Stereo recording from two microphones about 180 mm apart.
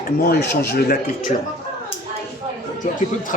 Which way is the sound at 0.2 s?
60° left (ahead or behind).